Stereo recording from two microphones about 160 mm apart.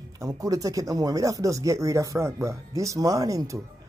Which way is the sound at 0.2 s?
20° right (ahead or behind).